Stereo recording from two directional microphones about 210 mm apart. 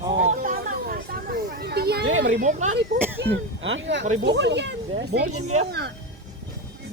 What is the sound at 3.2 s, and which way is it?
Speech, 55° right (ahead or behind).